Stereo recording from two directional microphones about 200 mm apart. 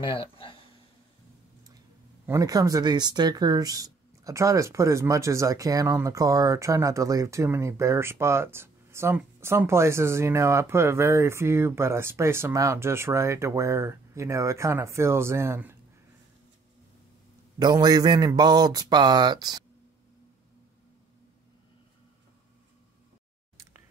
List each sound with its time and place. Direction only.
0.0 s speech: 25° left (ahead or behind)
2.2 s speech: 15° right (ahead or behind)
17.6 s speech: 20° right (ahead or behind)